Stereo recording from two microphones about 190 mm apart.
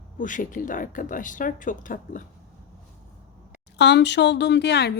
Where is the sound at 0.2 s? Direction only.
45° left (ahead or behind).